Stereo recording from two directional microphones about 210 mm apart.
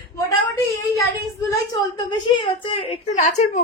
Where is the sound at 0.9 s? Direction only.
15° left (ahead or behind).